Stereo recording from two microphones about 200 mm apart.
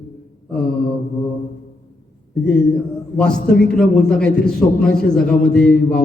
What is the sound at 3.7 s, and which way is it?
A man's voice, 5° left (ahead or behind).